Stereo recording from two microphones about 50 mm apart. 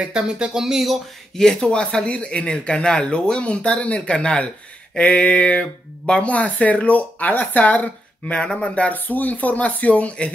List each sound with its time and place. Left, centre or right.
0.0 s speech: centre
1.3 s speech: centre; by 8.4 s left
8.4 s speech: centre